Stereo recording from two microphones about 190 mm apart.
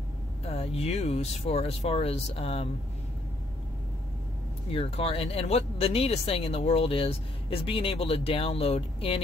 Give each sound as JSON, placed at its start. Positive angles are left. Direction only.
{"t": 0.5, "sound": "speech", "side_deg": 35}
{"t": 4.6, "sound": "speech", "side_deg": 30}